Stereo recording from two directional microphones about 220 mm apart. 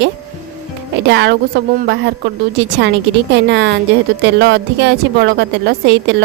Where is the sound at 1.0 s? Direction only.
50° right (ahead or behind).